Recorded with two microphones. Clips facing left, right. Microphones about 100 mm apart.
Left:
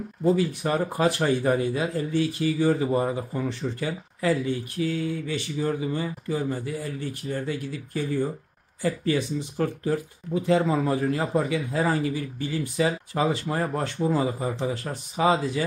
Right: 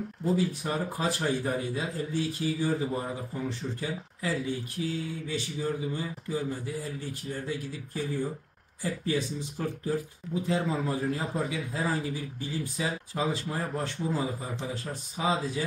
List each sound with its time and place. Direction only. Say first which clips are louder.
0.2 s speech: left 6 dB; 65° left (ahead or behind)